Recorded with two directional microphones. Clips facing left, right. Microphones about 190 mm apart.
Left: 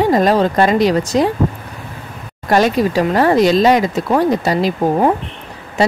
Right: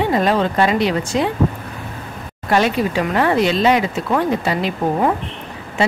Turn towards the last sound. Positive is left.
turn(degrees=40)  # may be behind; listen again after turning